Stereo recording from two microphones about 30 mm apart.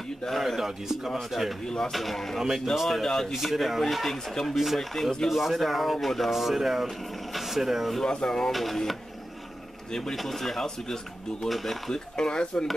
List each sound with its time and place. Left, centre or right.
0.3 s speech: centre
0.6 s speech: centre
3.1 s speech: centre
3.3 s speech: centre
5.3 s speech: centre
6.3 s speech: centre
8.0 s speech: left
8.5 s speech: centre
9.8 s speech: left
10.1 s speech: centre
11.9 s speech: left